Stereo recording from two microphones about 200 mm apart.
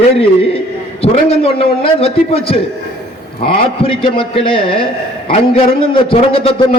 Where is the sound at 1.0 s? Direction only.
30° left (ahead or behind).